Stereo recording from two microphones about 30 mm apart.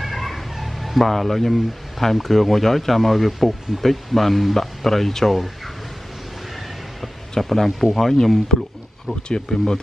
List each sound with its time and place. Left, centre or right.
0.0 s speech: centre
7.3 s speech: centre